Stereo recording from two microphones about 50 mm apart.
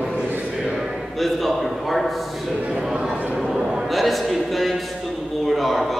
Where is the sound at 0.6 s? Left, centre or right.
Centre.